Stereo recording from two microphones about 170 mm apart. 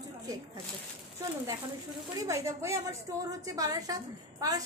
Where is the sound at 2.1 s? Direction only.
20° right (ahead or behind).